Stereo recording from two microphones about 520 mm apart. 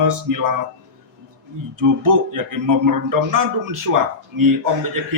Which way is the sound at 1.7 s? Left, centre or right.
Right.